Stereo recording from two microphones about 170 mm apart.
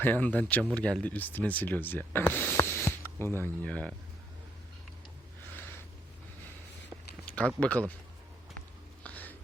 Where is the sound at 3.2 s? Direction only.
15° right (ahead or behind).